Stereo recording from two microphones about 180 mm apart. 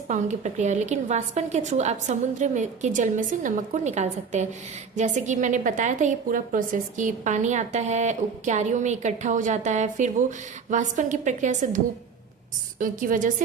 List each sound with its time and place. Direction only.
0.1 s a woman's voice: 40° right (ahead or behind)
12.8 s a woman's voice: 50° right (ahead or behind)